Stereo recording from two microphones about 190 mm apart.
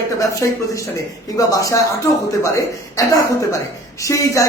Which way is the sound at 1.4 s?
20° left (ahead or behind).